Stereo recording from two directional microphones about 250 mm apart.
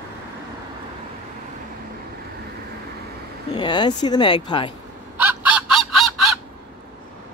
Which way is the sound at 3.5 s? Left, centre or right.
Centre.